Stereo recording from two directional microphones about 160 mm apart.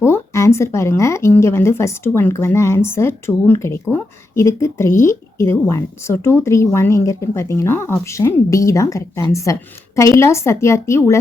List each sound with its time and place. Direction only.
0.0 s a woman's voice: 15° left (ahead or behind)